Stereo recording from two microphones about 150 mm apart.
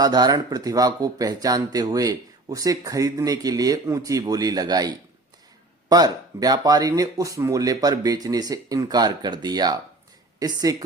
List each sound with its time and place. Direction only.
0.0 s speech: 25° right (ahead or behind)
5.9 s speech: 25° right (ahead or behind)